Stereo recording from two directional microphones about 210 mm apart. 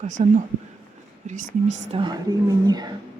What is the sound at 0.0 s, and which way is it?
Speech, 35° right (ahead or behind).